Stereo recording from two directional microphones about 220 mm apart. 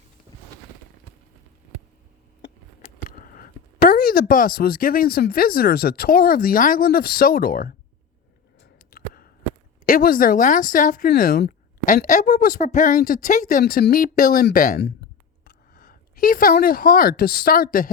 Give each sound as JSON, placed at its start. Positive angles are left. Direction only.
{"t": 2.8, "sound": "speech", "side_deg": 40}
{"t": 8.9, "sound": "a sound", "side_deg": 40}
{"t": 9.8, "sound": "speech", "side_deg": 40}
{"t": 12.0, "sound": "speech", "side_deg": 35}